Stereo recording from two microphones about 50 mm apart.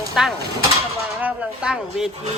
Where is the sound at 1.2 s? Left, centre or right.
Right.